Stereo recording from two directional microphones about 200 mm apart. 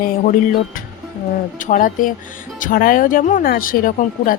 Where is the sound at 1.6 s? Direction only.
40° left (ahead or behind).